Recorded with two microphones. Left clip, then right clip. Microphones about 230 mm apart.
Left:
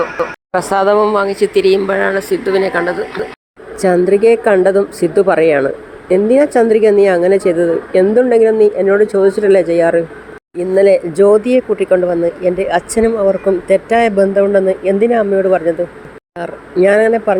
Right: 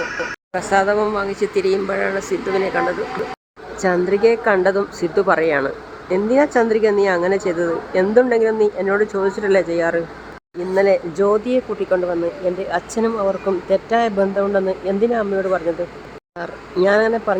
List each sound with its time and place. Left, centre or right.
0.5 s a woman's voice: centre